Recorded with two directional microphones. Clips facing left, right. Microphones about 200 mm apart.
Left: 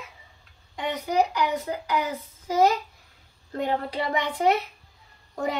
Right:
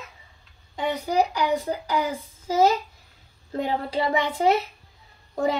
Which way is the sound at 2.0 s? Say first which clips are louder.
Right 2 dB; 5° right (ahead or behind).